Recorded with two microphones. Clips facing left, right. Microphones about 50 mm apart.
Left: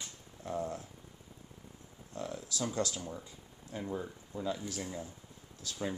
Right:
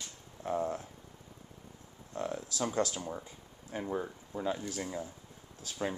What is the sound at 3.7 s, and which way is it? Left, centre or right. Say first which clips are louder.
Speech: right 3 dB; right.